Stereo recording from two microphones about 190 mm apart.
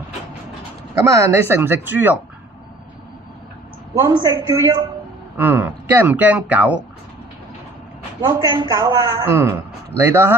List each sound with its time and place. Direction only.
1.0 s a man's voice: 15° right (ahead or behind)
4.0 s a man's voice: 20° right (ahead or behind)
5.4 s a man's voice: 10° right (ahead or behind)
8.2 s a man's voice: 20° right (ahead or behind)